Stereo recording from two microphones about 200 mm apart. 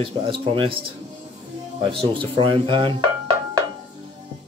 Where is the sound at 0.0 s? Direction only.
25° right (ahead or behind).